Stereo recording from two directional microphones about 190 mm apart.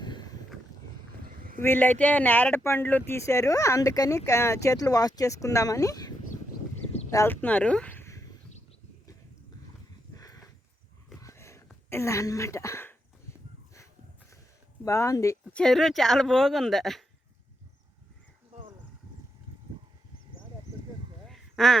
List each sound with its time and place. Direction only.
0.0 s a sound: 20° left (ahead or behind)
1.2 s a sound: 50° right (ahead or behind)
1.6 s speech: 10° left (ahead or behind)
10.2 s horse: 20° left (ahead or behind)
11.2 s a sound: 15° left (ahead or behind)
11.7 s speech: 15° left (ahead or behind)
14.8 s speech: 15° left (ahead or behind)
15.6 s a woman's voice: centre (ahead or behind)
21.2 s quack: centre (ahead or behind)